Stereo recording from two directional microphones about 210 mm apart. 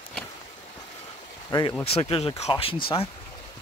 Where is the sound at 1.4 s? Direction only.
15° left (ahead or behind).